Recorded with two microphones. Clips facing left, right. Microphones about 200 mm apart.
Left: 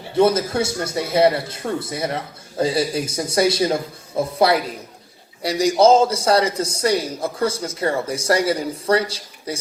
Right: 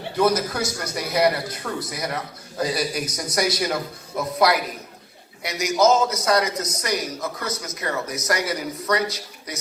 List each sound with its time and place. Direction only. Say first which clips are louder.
0.2 s a man's voice: left 4 dB; 25° left (ahead or behind)